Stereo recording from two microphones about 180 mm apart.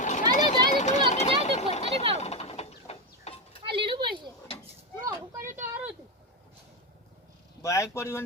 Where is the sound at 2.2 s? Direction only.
35° left (ahead or behind).